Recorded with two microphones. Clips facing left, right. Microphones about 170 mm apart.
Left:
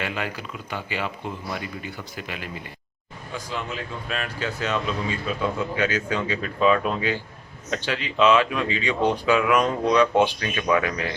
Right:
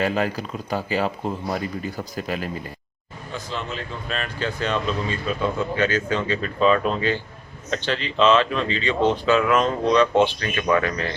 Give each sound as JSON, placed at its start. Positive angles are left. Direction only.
{"t": 0.0, "sound": "speech", "side_deg": -40}
{"t": 3.3, "sound": "speech", "side_deg": 10}